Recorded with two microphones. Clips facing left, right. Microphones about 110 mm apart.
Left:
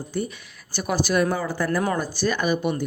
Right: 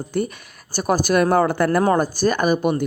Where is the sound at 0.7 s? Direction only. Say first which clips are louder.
Right 4 dB; 45° right (ahead or behind).